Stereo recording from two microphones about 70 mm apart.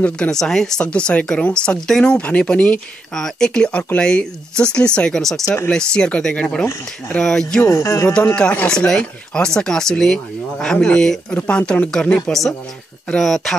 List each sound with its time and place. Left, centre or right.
0.0 s speech: centre
7.6 s speech: left
8.4 s speech: centre
12.3 s speech: centre